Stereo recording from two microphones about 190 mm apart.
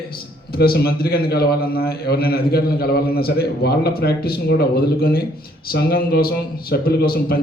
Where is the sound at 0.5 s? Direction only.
55° left (ahead or behind).